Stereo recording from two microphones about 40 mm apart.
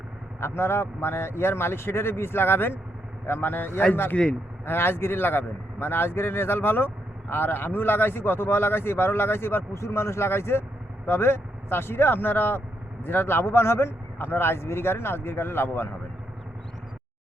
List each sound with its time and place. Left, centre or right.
0.3 s speech: left
3.2 s a man's voice: left
4.2 s speech: left
4.6 s speech: left
11.0 s speech: left